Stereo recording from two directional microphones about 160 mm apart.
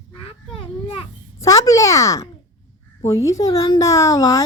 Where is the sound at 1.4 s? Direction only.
20° left (ahead or behind).